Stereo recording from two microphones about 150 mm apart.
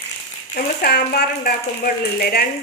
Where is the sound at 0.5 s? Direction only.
90° left.